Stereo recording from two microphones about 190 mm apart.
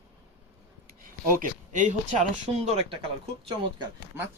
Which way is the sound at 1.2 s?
45° right (ahead or behind).